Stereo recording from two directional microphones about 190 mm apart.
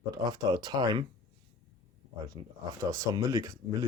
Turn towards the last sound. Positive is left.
turn(degrees=-20)  # may be behind; listen again after turning